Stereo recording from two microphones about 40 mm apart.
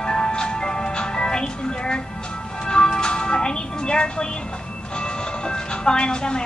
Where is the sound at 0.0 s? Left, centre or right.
Centre.